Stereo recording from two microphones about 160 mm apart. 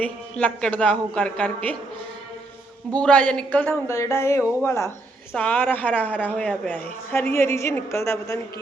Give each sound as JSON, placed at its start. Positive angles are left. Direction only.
{"t": 0.0, "sound": "a woman's voice", "side_deg": 5}
{"t": 3.0, "sound": "a woman's voice", "side_deg": 10}